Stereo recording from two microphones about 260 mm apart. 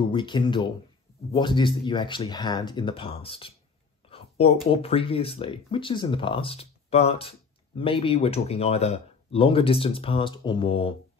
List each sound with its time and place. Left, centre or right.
0.0 s speech: centre
4.1 s a sound: left
4.6 s speech: left